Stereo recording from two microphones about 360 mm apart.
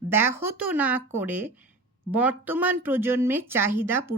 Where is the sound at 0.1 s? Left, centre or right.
Centre.